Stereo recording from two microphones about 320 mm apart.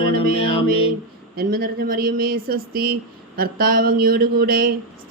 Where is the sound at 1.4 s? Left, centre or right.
Right.